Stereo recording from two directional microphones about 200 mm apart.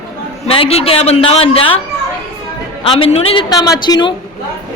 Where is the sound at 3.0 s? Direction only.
30° left (ahead or behind).